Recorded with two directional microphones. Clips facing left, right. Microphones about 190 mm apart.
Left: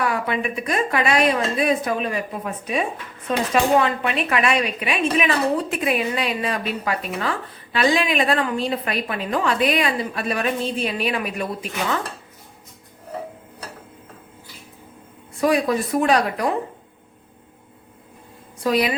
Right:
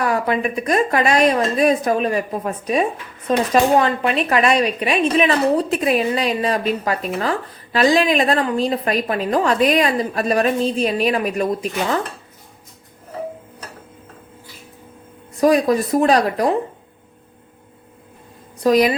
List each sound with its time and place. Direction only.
0.0 s a woman's voice: 40° right (ahead or behind)
15.4 s a woman's voice: 40° right (ahead or behind)
18.6 s a woman's voice: 40° right (ahead or behind)